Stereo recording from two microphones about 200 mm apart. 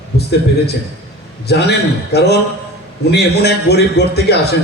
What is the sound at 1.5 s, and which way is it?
A man's voice, 55° left (ahead or behind).